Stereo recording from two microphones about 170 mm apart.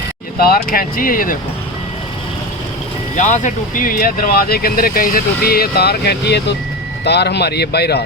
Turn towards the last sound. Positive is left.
turn(degrees=70)  # may be behind; listen again after turning